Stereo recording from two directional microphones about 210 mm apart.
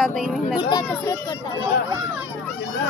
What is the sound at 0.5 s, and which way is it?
Speech, 20° left (ahead or behind).